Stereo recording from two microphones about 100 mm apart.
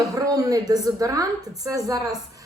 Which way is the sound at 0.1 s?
35° right (ahead or behind).